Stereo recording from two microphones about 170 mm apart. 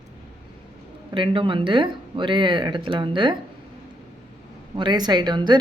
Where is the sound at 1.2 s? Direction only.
30° right (ahead or behind).